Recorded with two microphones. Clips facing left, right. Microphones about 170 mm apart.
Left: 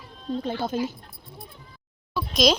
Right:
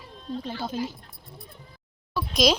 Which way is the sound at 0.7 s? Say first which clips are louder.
Left 2 dB; 50° left (ahead or behind).